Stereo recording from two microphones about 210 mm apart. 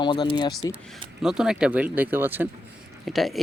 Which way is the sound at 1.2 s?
Centre (ahead or behind).